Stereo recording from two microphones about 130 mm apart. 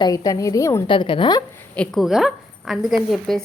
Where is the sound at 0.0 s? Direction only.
25° left (ahead or behind).